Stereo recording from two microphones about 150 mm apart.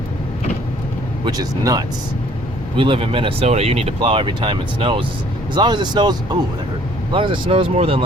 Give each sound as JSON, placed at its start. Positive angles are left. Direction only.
{"t": 1.2, "sound": "speech", "side_deg": -25}
{"t": 2.7, "sound": "speech", "side_deg": -35}